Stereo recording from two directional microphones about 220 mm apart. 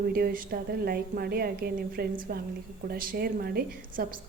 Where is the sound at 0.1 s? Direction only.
40° right (ahead or behind).